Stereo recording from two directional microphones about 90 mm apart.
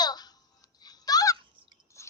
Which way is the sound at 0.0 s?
50° left (ahead or behind).